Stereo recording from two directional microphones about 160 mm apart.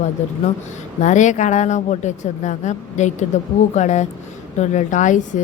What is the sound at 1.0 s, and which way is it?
A woman's voice, 50° left (ahead or behind).